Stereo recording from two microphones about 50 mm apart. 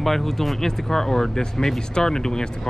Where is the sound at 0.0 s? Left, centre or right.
Centre.